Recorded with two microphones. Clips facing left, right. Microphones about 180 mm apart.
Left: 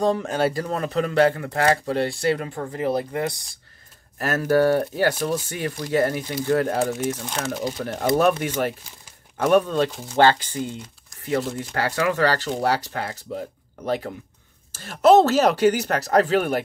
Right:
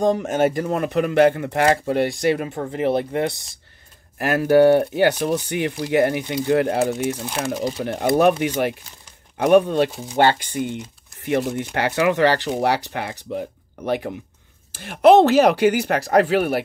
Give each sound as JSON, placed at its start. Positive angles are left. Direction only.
{"t": 0.2, "sound": "speech", "side_deg": -20}
{"t": 4.2, "sound": "speech", "side_deg": -15}